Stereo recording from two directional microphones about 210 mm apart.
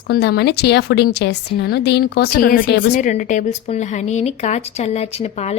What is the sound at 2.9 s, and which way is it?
A woman's voice, 35° left (ahead or behind).